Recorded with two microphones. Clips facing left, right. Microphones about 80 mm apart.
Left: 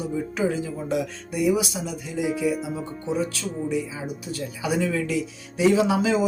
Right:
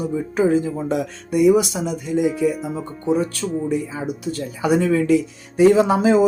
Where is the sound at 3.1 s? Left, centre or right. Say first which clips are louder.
Right 5 dB; right.